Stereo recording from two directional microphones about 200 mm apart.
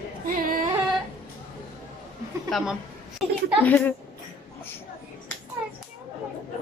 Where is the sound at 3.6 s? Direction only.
10° left (ahead or behind).